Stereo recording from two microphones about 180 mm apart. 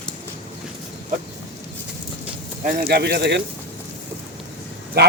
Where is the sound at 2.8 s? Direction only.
60° right (ahead or behind).